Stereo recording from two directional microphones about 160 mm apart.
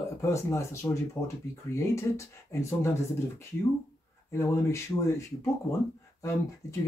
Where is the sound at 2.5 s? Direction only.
15° left (ahead or behind).